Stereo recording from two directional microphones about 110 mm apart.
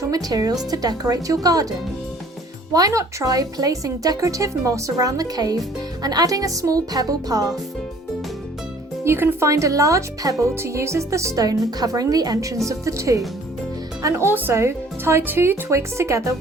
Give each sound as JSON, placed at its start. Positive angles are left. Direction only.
{"t": 0.0, "sound": "a woman's voice", "side_deg": -35}
{"t": 2.7, "sound": "a woman's voice", "side_deg": -30}
{"t": 9.0, "sound": "speech", "side_deg": -20}